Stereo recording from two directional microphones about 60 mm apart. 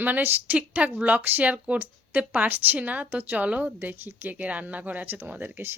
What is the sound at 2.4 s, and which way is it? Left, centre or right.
A woman's voice, right.